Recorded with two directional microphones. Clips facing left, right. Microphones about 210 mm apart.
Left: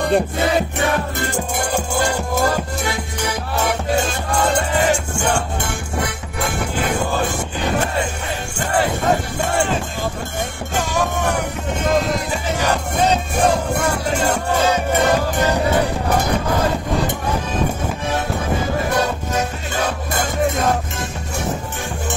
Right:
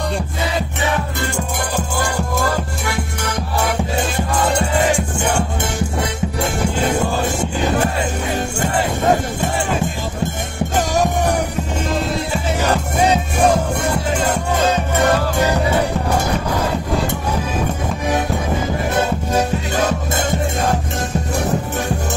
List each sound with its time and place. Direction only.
10.8 s music: 40° right (ahead or behind)